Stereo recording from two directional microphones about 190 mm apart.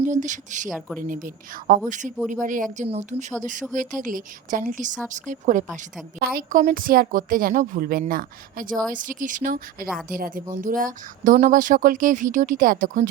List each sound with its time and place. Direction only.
0.0 s a woman's voice: 40° right (ahead or behind)